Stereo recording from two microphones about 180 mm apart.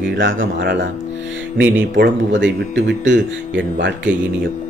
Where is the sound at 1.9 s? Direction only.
85° right.